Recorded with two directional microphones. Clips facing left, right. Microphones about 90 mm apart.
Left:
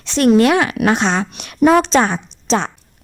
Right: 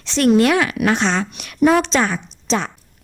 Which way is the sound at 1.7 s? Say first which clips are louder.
Left 4 dB; 40° left (ahead or behind).